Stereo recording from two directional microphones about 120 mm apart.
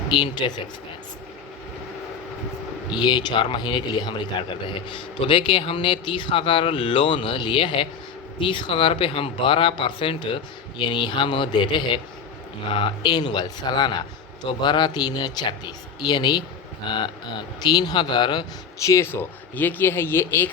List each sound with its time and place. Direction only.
0.1 s speech: 40° left (ahead or behind)
2.9 s speech: 40° left (ahead or behind)
18.8 s speech: 25° left (ahead or behind)